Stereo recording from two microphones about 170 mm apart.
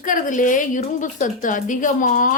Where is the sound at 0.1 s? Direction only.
50° left (ahead or behind).